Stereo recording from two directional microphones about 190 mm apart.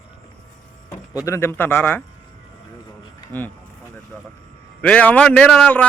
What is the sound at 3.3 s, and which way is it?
Speech, 10° left (ahead or behind).